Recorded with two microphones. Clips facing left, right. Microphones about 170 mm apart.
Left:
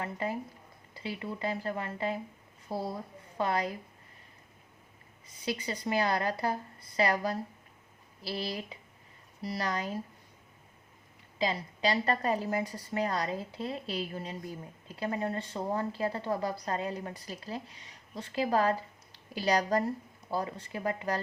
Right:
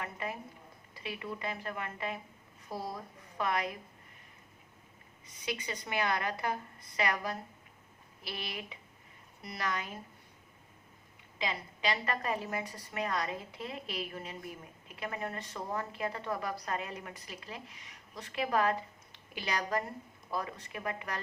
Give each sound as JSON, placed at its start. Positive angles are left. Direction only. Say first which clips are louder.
{"t": 0.0, "sound": "a woman's voice", "louder": "left 5 dB", "side_deg": 30}
{"t": 3.3, "sound": "a woman's voice", "louder": "left 3 dB", "side_deg": 30}
{"t": 5.5, "sound": "a woman's voice", "louder": "left 5 dB", "side_deg": 30}
{"t": 11.3, "sound": "a woman's voice", "louder": "left 6 dB", "side_deg": 35}